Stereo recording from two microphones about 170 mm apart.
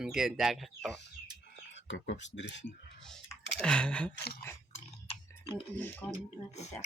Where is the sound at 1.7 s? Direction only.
90° left.